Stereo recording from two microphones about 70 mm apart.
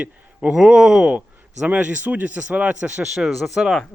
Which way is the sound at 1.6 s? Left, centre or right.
Centre.